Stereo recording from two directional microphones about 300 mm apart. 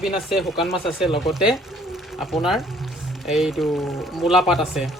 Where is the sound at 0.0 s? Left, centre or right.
Centre.